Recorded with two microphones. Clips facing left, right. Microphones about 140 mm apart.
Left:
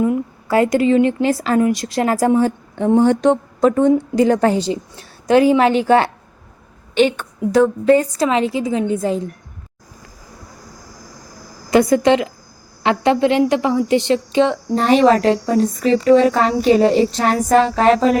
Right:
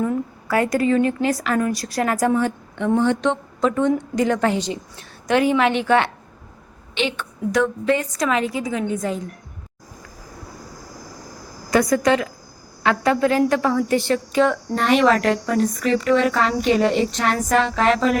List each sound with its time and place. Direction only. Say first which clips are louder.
0.4 s a woman's voice: left 5 dB; 25° left (ahead or behind)
6.9 s a woman's voice: left 9 dB; 45° left (ahead or behind); by 9.2 s 30° left (ahead or behind)
11.7 s a woman's voice: left 4 dB; 25° left (ahead or behind)
14.8 s a woman's voice: left 4 dB; 35° left (ahead or behind)